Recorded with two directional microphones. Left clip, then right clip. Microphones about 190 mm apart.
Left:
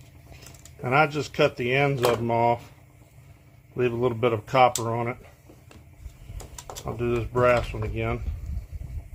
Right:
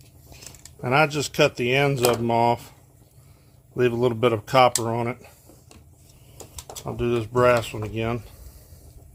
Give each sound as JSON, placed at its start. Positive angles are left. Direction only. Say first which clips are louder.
{"t": 0.3, "sound": "speech", "louder": "right 2 dB", "side_deg": -50}
{"t": 3.8, "sound": "speech", "louder": "right 3 dB", "side_deg": -50}
{"t": 6.8, "sound": "speech", "louder": "right 2 dB", "side_deg": -45}